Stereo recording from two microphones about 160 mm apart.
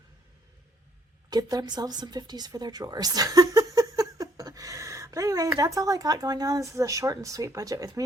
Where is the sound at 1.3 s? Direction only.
25° right (ahead or behind).